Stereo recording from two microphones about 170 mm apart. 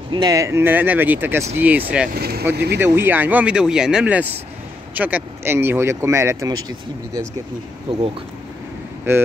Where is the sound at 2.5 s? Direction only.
80° right.